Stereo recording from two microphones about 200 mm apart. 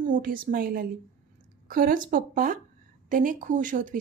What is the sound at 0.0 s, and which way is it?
A woman's voice, 45° right (ahead or behind).